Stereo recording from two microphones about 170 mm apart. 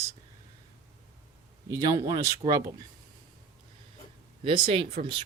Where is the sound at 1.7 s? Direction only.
20° right (ahead or behind).